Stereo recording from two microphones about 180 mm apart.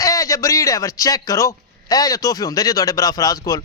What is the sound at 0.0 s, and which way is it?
A man's voice, 20° left (ahead or behind).